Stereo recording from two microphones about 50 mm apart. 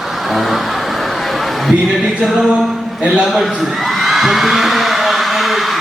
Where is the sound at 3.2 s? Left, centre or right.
Centre.